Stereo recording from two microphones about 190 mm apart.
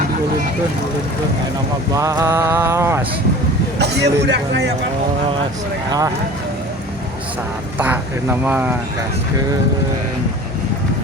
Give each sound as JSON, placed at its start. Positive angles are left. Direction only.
{"t": 1.9, "sound": "mantra", "side_deg": -20}
{"t": 3.8, "sound": "speech", "side_deg": -65}
{"t": 7.8, "sound": "mantra", "side_deg": -10}